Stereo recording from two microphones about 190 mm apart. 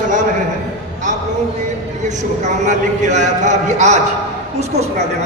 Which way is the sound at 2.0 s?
40° right (ahead or behind).